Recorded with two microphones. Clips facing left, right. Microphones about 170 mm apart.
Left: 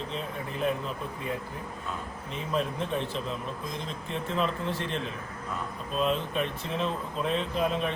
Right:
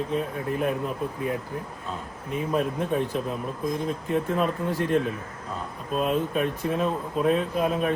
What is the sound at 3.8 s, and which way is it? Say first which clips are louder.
Speech: right 8 dB; 50° right (ahead or behind).